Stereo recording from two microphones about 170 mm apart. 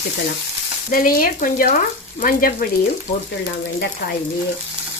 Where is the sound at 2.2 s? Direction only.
55° left (ahead or behind).